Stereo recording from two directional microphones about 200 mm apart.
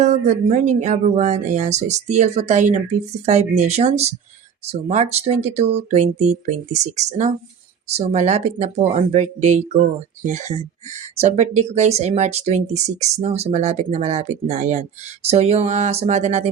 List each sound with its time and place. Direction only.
0.0 s speech: 35° right (ahead or behind)